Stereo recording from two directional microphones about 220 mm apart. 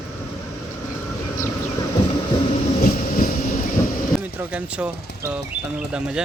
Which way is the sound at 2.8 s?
35° left (ahead or behind).